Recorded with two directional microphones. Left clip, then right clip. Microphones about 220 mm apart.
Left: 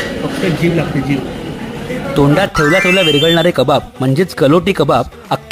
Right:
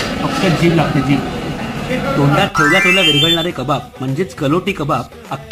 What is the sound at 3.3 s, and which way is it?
Speech, 50° left (ahead or behind).